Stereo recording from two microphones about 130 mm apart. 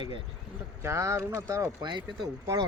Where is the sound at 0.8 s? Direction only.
20° right (ahead or behind).